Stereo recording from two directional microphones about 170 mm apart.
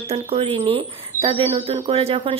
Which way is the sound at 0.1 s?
35° right (ahead or behind).